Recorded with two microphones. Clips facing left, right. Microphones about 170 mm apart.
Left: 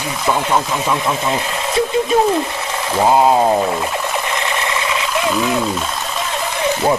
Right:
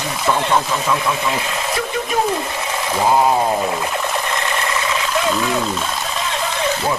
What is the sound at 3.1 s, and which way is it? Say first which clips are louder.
Speech: left 3 dB; 20° left (ahead or behind).